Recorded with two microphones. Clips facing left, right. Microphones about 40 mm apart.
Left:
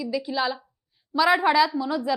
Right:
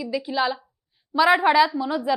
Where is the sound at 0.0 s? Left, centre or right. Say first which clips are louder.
Right 2 dB; centre.